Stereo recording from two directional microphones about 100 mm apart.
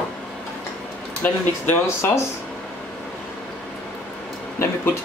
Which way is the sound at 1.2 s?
20° left (ahead or behind).